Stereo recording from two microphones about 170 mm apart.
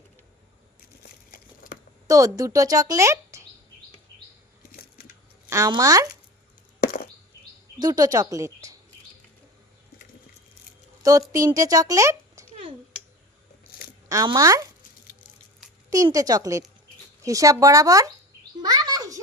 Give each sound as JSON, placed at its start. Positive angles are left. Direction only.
{"t": 1.0, "sound": "crumpling", "side_deg": 55}
{"t": 2.0, "sound": "speech", "side_deg": -20}
{"t": 4.7, "sound": "splinter", "side_deg": 65}
{"t": 5.5, "sound": "speech", "side_deg": -20}
{"t": 6.8, "sound": "a sound", "side_deg": 60}
{"t": 7.8, "sound": "speech", "side_deg": -20}
{"t": 11.3, "sound": "speech", "side_deg": -20}
{"t": 14.1, "sound": "speech", "side_deg": -20}
{"t": 15.9, "sound": "speech", "side_deg": -20}
{"t": 18.6, "sound": "a sound", "side_deg": -25}